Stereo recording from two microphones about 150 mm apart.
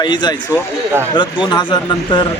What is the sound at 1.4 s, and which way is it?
Speech, 30° left (ahead or behind).